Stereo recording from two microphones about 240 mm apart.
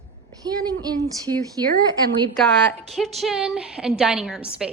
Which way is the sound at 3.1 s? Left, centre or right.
Centre.